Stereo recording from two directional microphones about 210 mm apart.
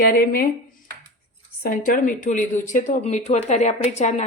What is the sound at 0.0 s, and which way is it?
Speech, 45° left (ahead or behind).